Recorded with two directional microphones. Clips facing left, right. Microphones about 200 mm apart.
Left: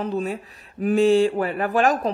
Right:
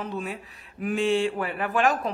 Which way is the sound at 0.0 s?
40° left (ahead or behind).